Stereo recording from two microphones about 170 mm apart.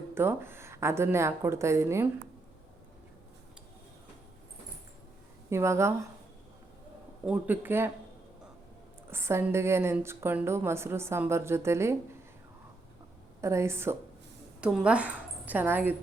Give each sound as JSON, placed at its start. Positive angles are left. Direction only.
{"t": 0.1, "sound": "a woman's voice", "side_deg": -15}
{"t": 5.5, "sound": "a woman's voice", "side_deg": -15}
{"t": 7.3, "sound": "a woman's voice", "side_deg": -10}
{"t": 9.0, "sound": "a woman's voice", "side_deg": -15}
{"t": 13.4, "sound": "a woman's voice", "side_deg": -15}
{"t": 14.6, "sound": "a woman's voice", "side_deg": -5}